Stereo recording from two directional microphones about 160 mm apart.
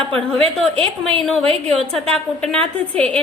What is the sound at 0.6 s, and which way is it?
A woman's voice, centre (ahead or behind).